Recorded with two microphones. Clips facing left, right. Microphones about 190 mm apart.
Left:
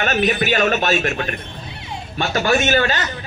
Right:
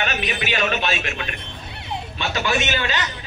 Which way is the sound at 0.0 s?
45° left (ahead or behind).